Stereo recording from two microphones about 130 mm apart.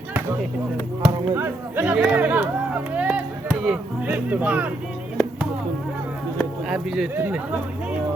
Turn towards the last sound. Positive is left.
turn(degrees=-15)  # may be behind; listen again after turning